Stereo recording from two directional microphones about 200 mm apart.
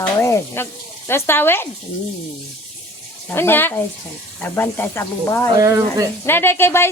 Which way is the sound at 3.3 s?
10° left (ahead or behind).